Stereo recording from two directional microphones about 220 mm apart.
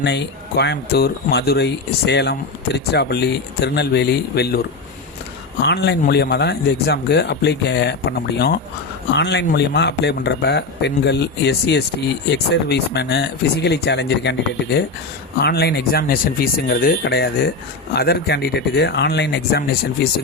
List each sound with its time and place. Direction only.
0.0 s speech: 50° left (ahead or behind)
5.6 s speech: 50° left (ahead or behind)